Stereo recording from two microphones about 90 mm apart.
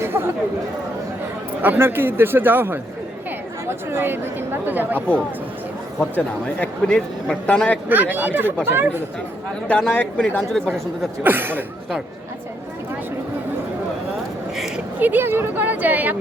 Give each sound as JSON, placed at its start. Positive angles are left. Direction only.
{"t": 0.1, "sound": "chatter", "side_deg": -30}
{"t": 1.6, "sound": "speech", "side_deg": -25}
{"t": 4.9, "sound": "a man's voice", "side_deg": 15}
{"t": 7.9, "sound": "speech", "side_deg": -20}
{"t": 9.6, "sound": "a man's voice", "side_deg": 15}
{"t": 11.2, "sound": "speech", "side_deg": -25}
{"t": 14.9, "sound": "speech", "side_deg": -20}